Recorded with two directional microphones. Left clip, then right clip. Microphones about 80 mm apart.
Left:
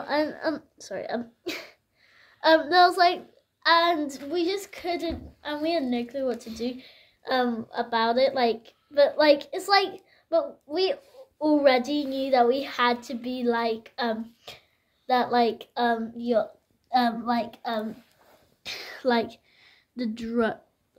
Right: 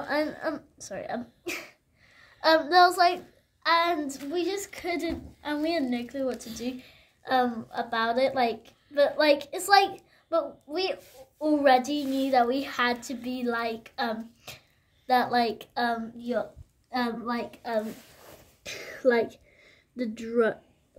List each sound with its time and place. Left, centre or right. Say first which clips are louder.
0.0 s a woman's voice: left 2 dB; centre
0.4 s speech: left 3 dB; left
2.2 s child singing: left 2 dB; centre
3.6 s a woman's voice: left 3 dB; left; by 16.0 s centre
16.2 s speech: left 6 dB; left
16.9 s a woman's voice: left 6 dB; left
18.6 s a sound: right 2 dB; left